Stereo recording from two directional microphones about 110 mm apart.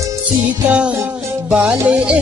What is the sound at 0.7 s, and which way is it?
Music, 10° right (ahead or behind).